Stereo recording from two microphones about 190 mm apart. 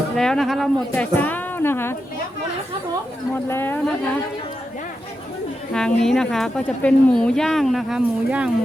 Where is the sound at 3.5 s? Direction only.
10° left (ahead or behind).